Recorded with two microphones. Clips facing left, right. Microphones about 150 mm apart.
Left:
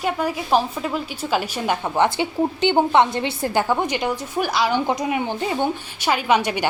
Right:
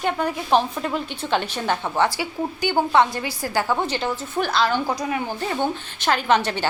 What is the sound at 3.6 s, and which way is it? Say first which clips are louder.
A woman's voice: left 2 dB; 15° left (ahead or behind).